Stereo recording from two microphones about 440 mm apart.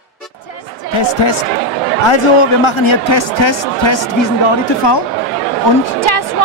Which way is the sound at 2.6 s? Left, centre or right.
Left.